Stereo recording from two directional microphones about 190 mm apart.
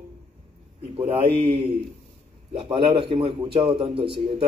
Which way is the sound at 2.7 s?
30° right (ahead or behind).